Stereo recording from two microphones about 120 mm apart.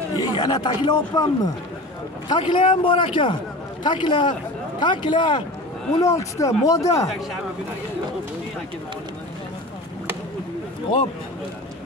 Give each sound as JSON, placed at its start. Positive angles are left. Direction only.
{"t": 0.1, "sound": "a man's voice", "side_deg": 35}
{"t": 5.9, "sound": "speech", "side_deg": 25}